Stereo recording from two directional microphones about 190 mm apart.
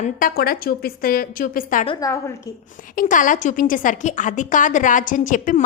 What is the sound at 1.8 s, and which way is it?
Speech, 20° left (ahead or behind).